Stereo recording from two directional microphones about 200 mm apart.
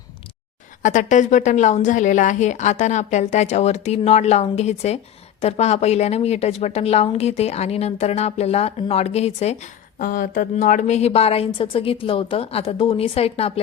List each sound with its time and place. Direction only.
0.8 s a woman's voice: 40° left (ahead or behind)